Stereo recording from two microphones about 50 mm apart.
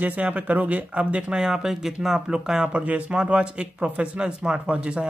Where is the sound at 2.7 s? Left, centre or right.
Right.